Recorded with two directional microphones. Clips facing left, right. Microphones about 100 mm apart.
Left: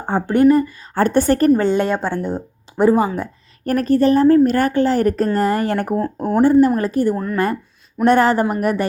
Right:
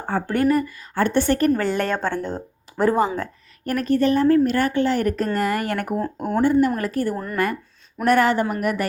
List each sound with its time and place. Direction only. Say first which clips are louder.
0.0 s speech: left 5 dB; 20° left (ahead or behind)
0.4 s a woman's voice: left 7 dB; 35° left (ahead or behind)
1.5 s speech: left 5 dB; 20° left (ahead or behind)
3.7 s a woman's voice: left 5 dB; 35° left (ahead or behind); by 7.2 s 20° left (ahead or behind)
8.0 s a woman's voice: left 4 dB; 30° left (ahead or behind)